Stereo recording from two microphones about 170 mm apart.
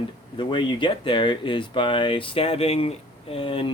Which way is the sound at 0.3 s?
25° left (ahead or behind).